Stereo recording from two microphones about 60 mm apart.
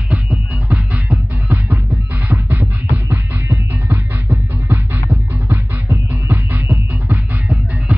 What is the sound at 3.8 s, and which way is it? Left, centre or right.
Music, right.